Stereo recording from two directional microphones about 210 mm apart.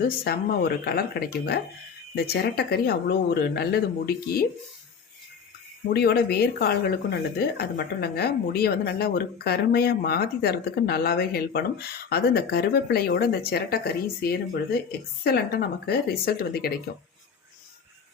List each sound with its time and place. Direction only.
0.3 s a woman's voice: 50° left (ahead or behind)
5.9 s a woman's voice: 50° left (ahead or behind)